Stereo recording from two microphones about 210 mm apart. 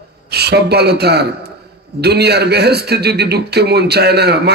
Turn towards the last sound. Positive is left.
turn(degrees=-50)  # may be behind; listen again after turning